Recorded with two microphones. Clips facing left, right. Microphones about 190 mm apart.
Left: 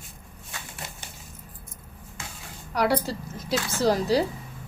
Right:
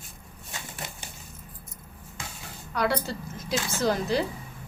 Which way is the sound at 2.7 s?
35° left (ahead or behind).